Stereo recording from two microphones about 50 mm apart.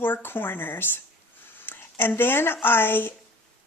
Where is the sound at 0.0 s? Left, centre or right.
Left.